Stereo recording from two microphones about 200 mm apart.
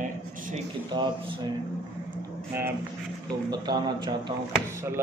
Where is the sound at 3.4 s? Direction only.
20° right (ahead or behind).